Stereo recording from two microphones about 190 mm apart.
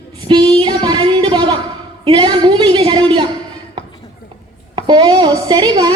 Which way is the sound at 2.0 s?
25° right (ahead or behind).